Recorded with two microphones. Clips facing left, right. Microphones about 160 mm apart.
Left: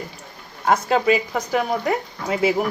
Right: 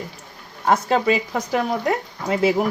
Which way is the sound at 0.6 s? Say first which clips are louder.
Even; centre (ahead or behind).